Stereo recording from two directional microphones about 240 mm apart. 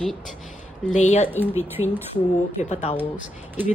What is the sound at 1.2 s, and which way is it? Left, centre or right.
Speech, centre.